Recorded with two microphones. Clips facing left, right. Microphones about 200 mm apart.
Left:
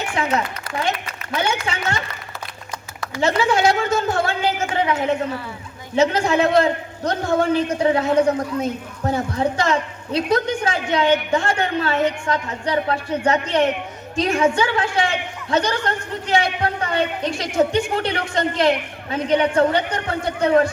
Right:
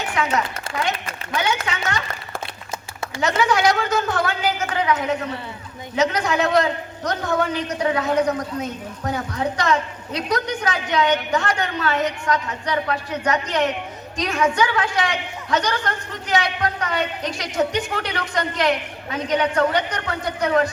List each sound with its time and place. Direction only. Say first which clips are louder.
0.2 s a woman's voice: left 1 dB; 30° left (ahead or behind)
3.2 s a man's voice: left 2 dB; 30° left (ahead or behind)